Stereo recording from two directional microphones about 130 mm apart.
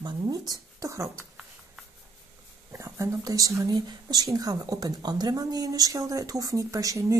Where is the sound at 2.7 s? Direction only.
20° right (ahead or behind).